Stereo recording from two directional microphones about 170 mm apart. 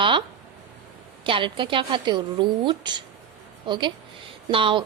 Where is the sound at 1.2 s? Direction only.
30° right (ahead or behind).